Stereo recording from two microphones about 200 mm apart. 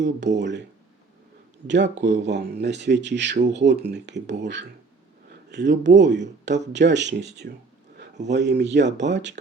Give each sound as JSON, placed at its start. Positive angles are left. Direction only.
{"t": 0.0, "sound": "speech", "side_deg": -65}
{"t": 1.6, "sound": "speech", "side_deg": -60}